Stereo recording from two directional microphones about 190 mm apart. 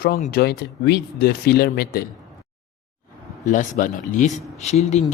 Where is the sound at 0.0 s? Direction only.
55° left (ahead or behind).